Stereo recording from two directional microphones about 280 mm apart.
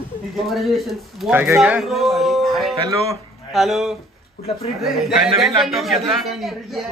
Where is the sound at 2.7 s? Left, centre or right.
Centre.